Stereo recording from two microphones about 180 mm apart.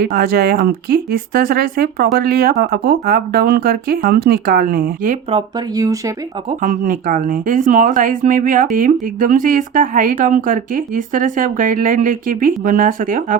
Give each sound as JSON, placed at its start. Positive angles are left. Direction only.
{"t": 0.0, "sound": "speech", "side_deg": -55}
{"t": 5.7, "sound": "speech", "side_deg": -20}
{"t": 6.6, "sound": "speech", "side_deg": -45}